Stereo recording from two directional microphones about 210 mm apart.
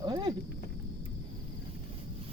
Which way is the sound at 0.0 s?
20° right (ahead or behind).